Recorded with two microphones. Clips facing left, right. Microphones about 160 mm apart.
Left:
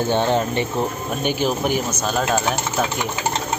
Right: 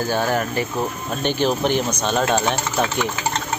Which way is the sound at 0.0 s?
25° left (ahead or behind).